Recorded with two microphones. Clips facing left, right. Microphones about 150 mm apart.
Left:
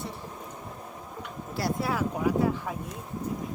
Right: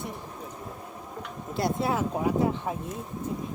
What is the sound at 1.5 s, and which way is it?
Speech, 20° right (ahead or behind).